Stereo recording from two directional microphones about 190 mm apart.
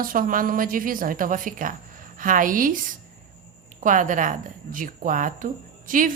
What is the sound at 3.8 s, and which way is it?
A woman's voice, 45° right (ahead or behind).